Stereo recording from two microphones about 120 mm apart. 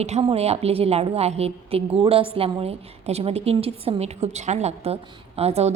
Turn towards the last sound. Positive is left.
turn(degrees=-60)  # may be behind; listen again after turning